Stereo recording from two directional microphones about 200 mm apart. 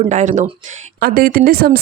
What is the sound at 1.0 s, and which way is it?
Speech, 50° right (ahead or behind).